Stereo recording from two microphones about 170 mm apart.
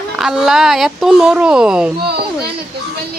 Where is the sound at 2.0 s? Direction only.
70° right (ahead or behind).